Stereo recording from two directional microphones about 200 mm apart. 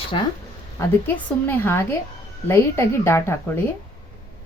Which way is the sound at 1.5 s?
10° left (ahead or behind).